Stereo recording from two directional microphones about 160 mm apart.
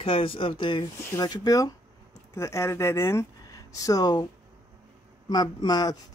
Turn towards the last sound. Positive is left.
turn(degrees=25)  # may be behind; listen again after turning